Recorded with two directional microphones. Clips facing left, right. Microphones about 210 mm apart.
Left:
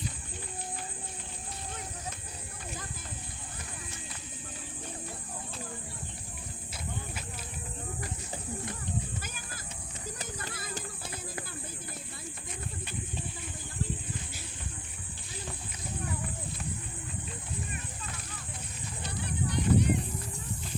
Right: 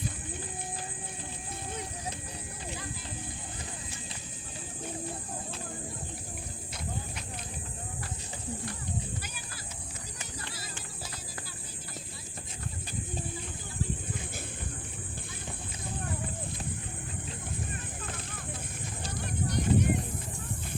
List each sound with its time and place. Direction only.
10.2 s music: 45° left (ahead or behind)
19.1 s music: 45° right (ahead or behind)